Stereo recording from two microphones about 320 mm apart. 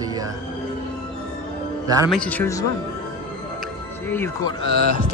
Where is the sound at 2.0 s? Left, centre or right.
Centre.